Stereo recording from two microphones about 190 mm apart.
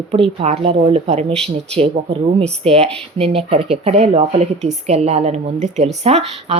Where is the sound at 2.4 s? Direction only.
35° right (ahead or behind).